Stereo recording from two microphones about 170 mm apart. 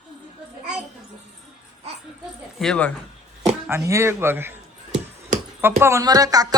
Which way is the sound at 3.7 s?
15° right (ahead or behind).